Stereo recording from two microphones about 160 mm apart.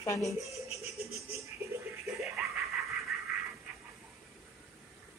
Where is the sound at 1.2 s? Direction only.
20° right (ahead or behind).